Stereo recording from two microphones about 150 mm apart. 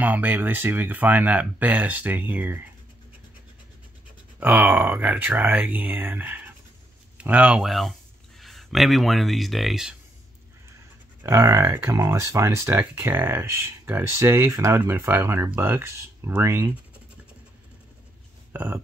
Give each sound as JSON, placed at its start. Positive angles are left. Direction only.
{"t": 0.0, "sound": "speech", "side_deg": -10}
{"t": 4.4, "sound": "speech", "side_deg": -10}
{"t": 11.2, "sound": "speech", "side_deg": -20}
{"t": 18.5, "sound": "a sound", "side_deg": -15}